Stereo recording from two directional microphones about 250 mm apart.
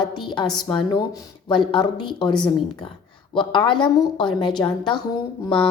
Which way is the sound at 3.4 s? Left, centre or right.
Centre.